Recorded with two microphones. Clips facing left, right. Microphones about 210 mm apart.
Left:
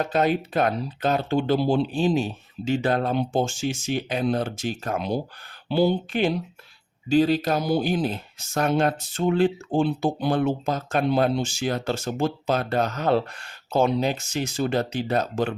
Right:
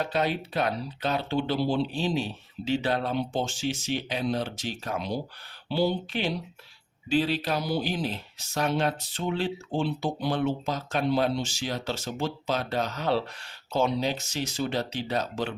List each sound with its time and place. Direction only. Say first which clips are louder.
0.0 s speech: left 5 dB; 50° left (ahead or behind)